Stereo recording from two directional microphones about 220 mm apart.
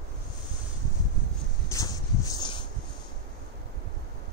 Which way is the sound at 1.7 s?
15° left (ahead or behind).